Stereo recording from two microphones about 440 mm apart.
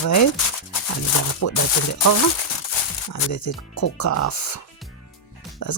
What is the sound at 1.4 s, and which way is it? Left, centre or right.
Speech, left.